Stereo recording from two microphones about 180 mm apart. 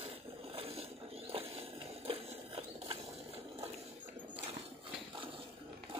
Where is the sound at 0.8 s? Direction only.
35° right (ahead or behind).